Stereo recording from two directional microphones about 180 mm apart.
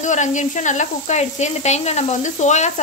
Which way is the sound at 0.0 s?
40° left (ahead or behind).